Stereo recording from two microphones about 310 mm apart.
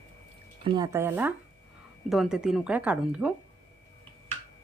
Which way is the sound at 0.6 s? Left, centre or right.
Centre.